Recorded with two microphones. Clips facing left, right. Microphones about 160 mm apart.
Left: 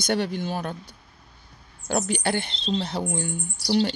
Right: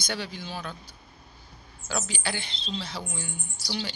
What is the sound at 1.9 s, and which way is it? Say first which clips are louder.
A man's voice: left 8 dB; 55° left (ahead or behind).